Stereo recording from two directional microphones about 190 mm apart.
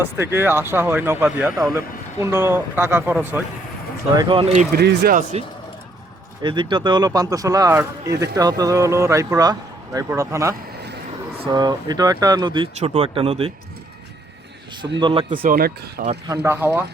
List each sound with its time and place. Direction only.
0.0 s speech: 10° right (ahead or behind)
4.1 s speech: 25° right (ahead or behind)
4.7 s speech: 55° right (ahead or behind)
5.3 s speech: 35° right (ahead or behind)
6.4 s speech: 25° right (ahead or behind)
14.9 s speech: 25° right (ahead or behind)
15.4 s speech: 50° right (ahead or behind)
16.3 s speech: 10° right (ahead or behind)